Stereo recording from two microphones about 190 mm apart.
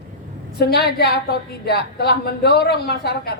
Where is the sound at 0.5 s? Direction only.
60° left (ahead or behind).